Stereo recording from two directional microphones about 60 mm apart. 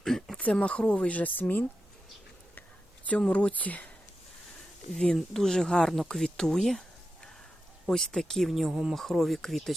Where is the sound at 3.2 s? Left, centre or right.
Centre.